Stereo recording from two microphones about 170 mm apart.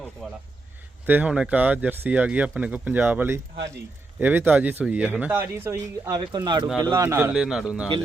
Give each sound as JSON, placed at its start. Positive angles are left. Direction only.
{"t": 1.0, "sound": "a man's voice", "side_deg": -10}